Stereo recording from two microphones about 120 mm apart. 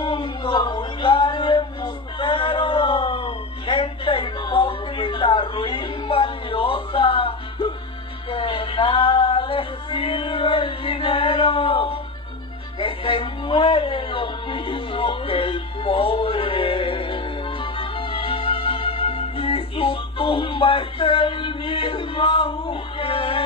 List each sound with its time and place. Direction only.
0.0 s music: 40° left (ahead or behind)